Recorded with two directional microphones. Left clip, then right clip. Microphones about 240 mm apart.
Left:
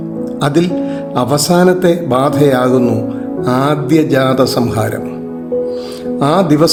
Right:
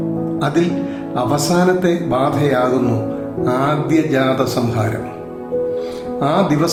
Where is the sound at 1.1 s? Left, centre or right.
Left.